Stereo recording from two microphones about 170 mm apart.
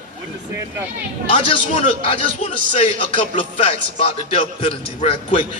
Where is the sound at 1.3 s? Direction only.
35° left (ahead or behind).